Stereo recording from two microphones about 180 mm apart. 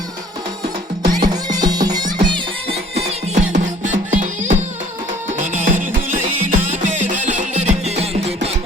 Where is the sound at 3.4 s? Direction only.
40° right (ahead or behind).